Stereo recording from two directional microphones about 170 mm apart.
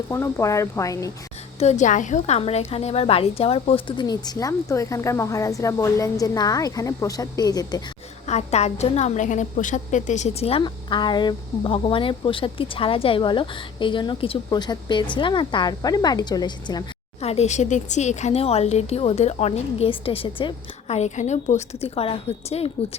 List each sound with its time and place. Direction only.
0.1 s speech: 15° left (ahead or behind)
1.5 s a woman's voice: 40° left (ahead or behind); by 7.8 s 20° left (ahead or behind)
8.3 s a woman's voice: 40° left (ahead or behind); by 16.8 s 25° left (ahead or behind)
17.2 s a woman's voice: 40° left (ahead or behind)